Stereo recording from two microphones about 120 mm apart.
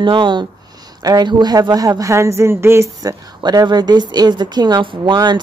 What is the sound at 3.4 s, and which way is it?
Speech, 35° right (ahead or behind).